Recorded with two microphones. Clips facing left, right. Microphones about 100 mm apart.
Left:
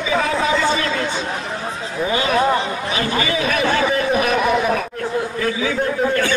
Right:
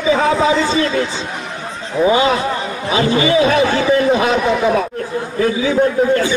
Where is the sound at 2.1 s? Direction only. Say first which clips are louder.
Right 2 dB; 20° right (ahead or behind).